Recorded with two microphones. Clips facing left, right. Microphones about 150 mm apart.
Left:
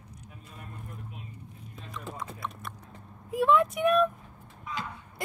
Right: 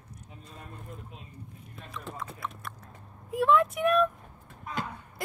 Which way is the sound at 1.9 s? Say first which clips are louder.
Left 1 dB; centre (ahead or behind).